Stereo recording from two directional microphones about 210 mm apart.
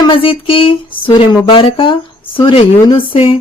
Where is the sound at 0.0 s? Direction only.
25° left (ahead or behind).